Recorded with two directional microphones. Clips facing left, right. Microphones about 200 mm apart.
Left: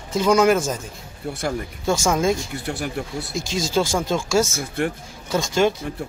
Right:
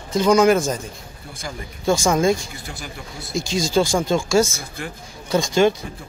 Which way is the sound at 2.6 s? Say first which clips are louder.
Left 10 dB; 65° left (ahead or behind).